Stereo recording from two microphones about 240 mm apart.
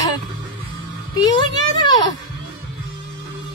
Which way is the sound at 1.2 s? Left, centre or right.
Centre.